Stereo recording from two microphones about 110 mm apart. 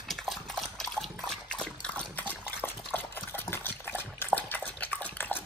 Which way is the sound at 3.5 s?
20° left (ahead or behind).